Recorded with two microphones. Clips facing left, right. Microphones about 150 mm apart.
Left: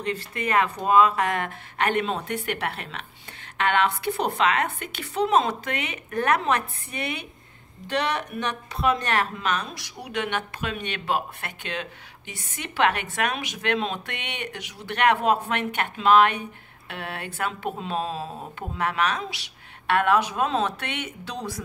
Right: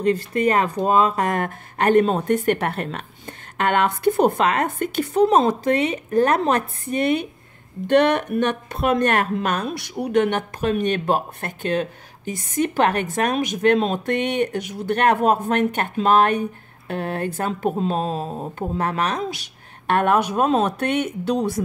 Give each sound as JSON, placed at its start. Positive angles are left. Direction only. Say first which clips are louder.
{"t": 0.0, "sound": "speech", "louder": "right 10 dB", "side_deg": -40}